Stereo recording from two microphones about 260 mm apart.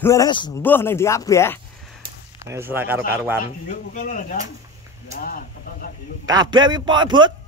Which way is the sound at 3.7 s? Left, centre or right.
Left.